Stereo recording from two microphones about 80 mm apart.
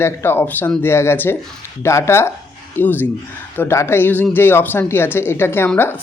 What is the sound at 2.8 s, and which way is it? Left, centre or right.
Speech, left.